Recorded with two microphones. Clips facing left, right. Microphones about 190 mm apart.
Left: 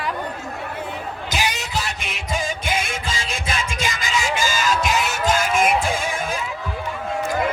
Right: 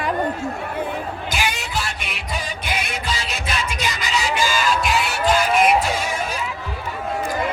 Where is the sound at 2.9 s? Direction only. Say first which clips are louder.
Right 1 dB; 50° left (ahead or behind).